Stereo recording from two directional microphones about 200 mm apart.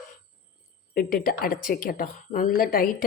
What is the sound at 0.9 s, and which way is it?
A woman's voice, 45° left (ahead or behind).